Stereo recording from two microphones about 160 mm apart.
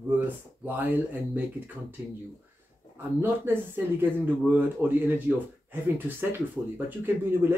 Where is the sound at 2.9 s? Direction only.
15° right (ahead or behind).